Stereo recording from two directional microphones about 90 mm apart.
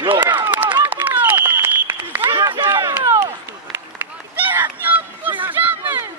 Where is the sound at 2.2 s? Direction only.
55° right (ahead or behind).